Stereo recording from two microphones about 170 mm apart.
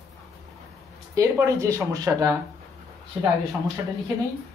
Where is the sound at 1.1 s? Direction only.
20° right (ahead or behind).